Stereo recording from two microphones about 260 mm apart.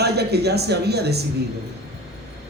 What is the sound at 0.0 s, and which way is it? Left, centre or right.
Speech, right.